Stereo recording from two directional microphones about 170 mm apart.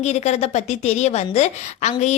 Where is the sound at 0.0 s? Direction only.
40° left (ahead or behind).